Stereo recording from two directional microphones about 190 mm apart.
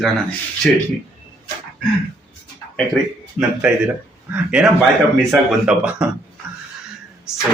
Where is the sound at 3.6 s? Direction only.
5° right (ahead or behind).